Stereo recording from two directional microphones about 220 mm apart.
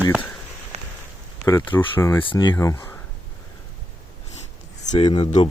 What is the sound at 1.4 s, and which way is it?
Speech, 15° left (ahead or behind).